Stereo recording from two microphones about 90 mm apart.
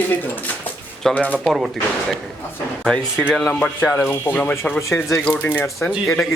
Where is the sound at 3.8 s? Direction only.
25° left (ahead or behind).